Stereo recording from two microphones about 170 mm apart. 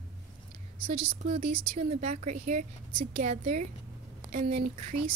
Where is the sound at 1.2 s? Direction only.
45° right (ahead or behind).